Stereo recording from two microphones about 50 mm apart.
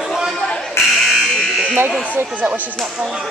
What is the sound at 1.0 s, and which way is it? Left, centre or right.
Fire alarm, centre.